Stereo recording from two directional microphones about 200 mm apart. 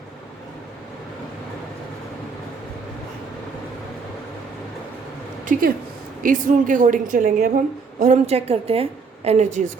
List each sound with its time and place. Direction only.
5.5 s a woman's voice: 45° right (ahead or behind)